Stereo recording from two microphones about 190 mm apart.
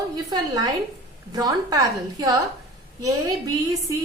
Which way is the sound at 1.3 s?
20° right (ahead or behind).